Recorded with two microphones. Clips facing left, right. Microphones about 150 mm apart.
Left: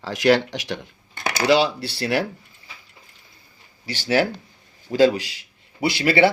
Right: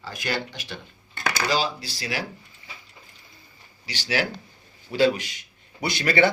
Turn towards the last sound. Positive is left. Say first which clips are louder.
# left 4 dB
turn(degrees=30)  # may be behind; listen again after turning